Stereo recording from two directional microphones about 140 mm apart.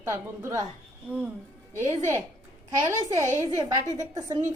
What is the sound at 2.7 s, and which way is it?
A woman's voice, 25° right (ahead or behind).